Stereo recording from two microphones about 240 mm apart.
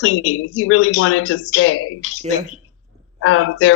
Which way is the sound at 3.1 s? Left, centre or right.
Left.